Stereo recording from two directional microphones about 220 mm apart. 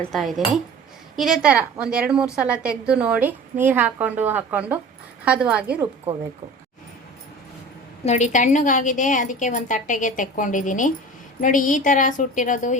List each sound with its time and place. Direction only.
0.0 s a woman's voice: centre (ahead or behind)
8.0 s a woman's voice: 30° left (ahead or behind)